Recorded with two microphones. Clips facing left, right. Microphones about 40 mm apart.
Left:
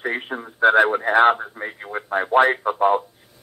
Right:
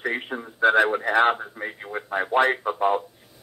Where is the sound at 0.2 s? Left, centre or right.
Centre.